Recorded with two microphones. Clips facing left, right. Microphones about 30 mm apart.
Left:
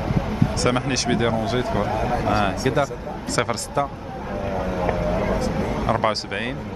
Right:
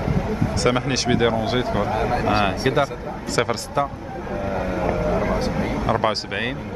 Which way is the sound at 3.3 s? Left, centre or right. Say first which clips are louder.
Right 1 dB; centre.